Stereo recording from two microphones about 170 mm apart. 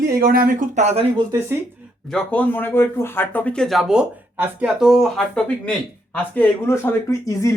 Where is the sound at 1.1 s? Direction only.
20° right (ahead or behind).